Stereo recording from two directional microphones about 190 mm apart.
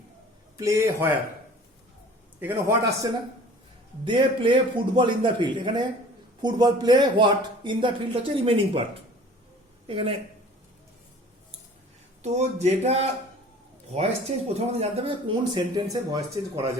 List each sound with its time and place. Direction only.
0.6 s a man's voice: 15° right (ahead or behind)
2.4 s a man's voice: 10° right (ahead or behind)
4.0 s speech: 25° right (ahead or behind)
9.8 s speech: 30° right (ahead or behind)
12.2 s speech: 35° right (ahead or behind)
15.5 s speech: 20° right (ahead or behind)